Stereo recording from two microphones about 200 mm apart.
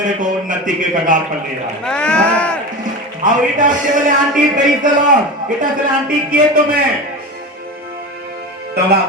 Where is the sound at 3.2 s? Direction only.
40° right (ahead or behind).